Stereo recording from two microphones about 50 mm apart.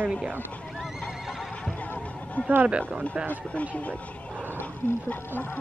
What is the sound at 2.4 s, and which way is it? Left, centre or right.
Speech, left.